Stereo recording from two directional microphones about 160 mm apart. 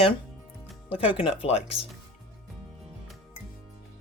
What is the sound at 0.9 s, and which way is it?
Speech, 35° left (ahead or behind).